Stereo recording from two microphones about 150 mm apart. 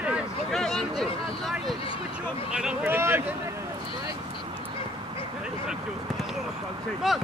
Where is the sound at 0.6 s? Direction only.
Centre (ahead or behind); by 3.2 s 15° right (ahead or behind).